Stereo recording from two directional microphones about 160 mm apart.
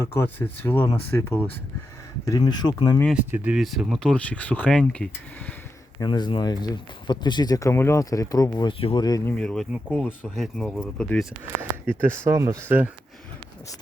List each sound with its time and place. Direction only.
0.0 s speech: 15° left (ahead or behind)
2.4 s speech: 25° left (ahead or behind)
3.3 s speech: 5° right (ahead or behind)
6.0 s speech: 25° left (ahead or behind)
9.0 s speech: 20° left (ahead or behind)
9.3 s speech: 5° left (ahead or behind)
9.7 s speech: 5° right (ahead or behind)
11.9 s speech: 15° right (ahead or behind)